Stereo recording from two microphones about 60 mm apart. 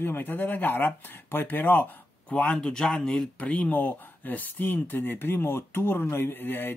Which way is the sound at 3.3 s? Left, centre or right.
Left.